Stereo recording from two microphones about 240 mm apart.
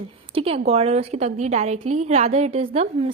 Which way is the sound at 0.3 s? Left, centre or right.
Right.